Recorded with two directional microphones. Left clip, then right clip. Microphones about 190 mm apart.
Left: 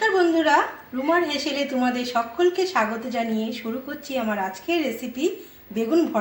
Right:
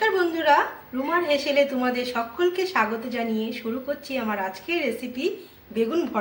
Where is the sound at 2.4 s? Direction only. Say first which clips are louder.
Left 1 dB; 35° left (ahead or behind).